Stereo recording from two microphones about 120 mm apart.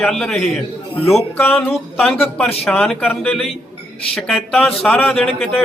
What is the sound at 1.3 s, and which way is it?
Speech, 20° left (ahead or behind).